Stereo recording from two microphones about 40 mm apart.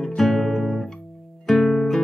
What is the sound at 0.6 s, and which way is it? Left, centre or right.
Guitar, centre.